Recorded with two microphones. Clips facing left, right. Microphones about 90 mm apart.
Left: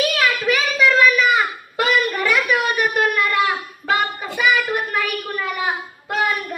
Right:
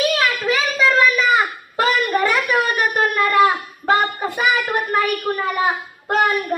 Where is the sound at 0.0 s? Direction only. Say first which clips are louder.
Even; 25° right (ahead or behind).